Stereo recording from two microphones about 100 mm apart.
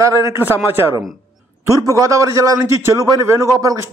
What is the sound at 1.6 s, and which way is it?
A man's voice, 35° right (ahead or behind).